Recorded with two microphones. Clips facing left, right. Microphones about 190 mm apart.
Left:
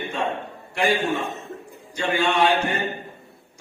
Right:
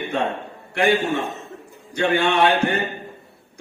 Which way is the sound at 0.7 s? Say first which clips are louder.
Right 3 dB; 60° right (ahead or behind).